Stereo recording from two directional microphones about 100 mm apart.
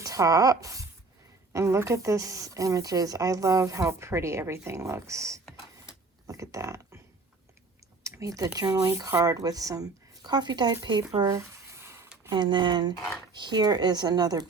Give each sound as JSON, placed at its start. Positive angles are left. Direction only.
{"t": 0.0, "sound": "a woman's voice", "side_deg": -35}
{"t": 6.2, "sound": "mechanisms", "side_deg": -30}
{"t": 8.0, "sound": "a sound", "side_deg": -35}
{"t": 8.5, "sound": "speech", "side_deg": -40}
{"t": 11.2, "sound": "a sound", "side_deg": -35}
{"t": 12.3, "sound": "speech", "side_deg": -50}